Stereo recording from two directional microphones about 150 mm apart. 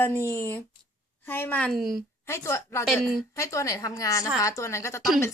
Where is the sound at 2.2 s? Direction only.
20° left (ahead or behind).